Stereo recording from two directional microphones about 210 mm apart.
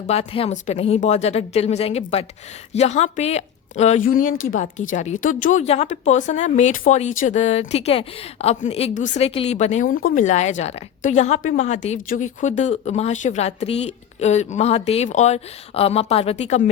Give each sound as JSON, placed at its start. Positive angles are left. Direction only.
{"t": 0.1, "sound": "a woman's voice", "side_deg": 30}